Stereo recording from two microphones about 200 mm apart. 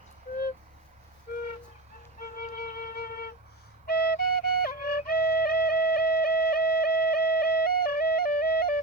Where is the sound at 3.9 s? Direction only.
45° left (ahead or behind).